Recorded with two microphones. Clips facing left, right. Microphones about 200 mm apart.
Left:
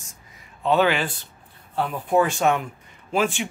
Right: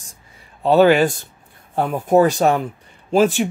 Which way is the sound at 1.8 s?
45° right (ahead or behind).